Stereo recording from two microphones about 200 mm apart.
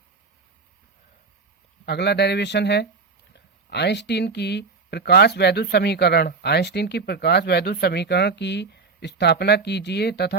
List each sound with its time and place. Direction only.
1.8 s speech: 55° left (ahead or behind)